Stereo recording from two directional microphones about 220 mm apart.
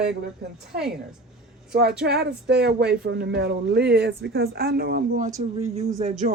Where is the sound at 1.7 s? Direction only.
45° right (ahead or behind).